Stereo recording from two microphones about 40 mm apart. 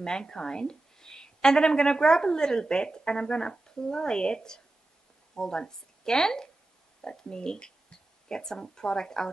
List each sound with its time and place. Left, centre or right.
0.0 s a woman's voice: centre